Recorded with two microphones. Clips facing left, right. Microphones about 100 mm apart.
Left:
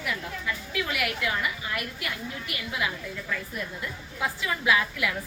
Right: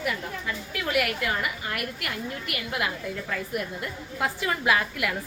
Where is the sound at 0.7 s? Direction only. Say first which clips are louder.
Right 4 dB; 45° right (ahead or behind).